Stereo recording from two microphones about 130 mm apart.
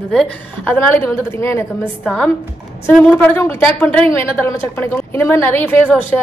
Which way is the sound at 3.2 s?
15° left (ahead or behind).